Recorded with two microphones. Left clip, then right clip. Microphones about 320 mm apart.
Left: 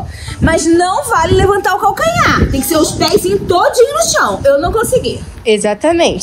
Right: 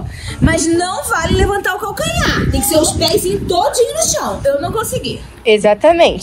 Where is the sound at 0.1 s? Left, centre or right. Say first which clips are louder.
Left 3 dB; left.